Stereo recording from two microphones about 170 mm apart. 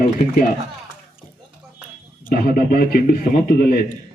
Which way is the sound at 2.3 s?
55° left (ahead or behind).